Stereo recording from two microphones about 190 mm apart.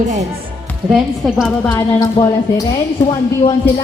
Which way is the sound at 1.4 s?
5° left (ahead or behind).